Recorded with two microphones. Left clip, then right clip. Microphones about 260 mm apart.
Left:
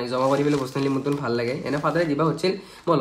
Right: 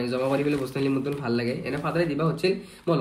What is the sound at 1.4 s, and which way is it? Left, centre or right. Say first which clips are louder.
Speech: left 4 dB; centre.